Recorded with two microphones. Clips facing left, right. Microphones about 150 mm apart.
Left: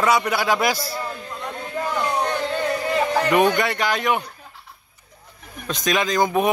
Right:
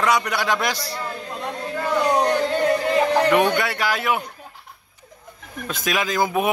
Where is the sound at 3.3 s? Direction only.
Centre (ahead or behind).